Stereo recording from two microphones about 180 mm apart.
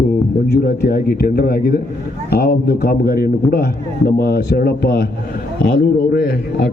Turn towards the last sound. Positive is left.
turn(degrees=60)  # may be behind; listen again after turning